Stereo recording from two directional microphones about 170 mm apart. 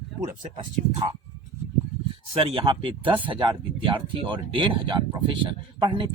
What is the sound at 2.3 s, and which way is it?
Speech, 35° right (ahead or behind).